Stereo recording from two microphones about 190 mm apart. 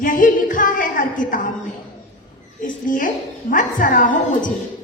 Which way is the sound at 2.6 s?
45° left (ahead or behind).